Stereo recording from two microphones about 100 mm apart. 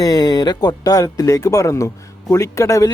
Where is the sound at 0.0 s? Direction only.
40° left (ahead or behind).